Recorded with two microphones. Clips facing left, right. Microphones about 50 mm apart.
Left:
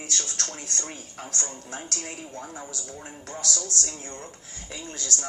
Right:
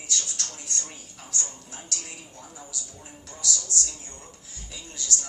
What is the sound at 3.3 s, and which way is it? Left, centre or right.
Music, left.